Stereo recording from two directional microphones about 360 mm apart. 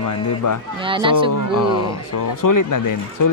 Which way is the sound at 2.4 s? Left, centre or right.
Left.